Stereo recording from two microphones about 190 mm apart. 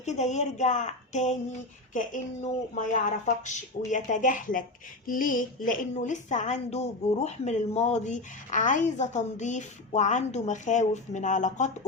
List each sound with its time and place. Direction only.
0.0 s a woman's voice: 40° left (ahead or behind)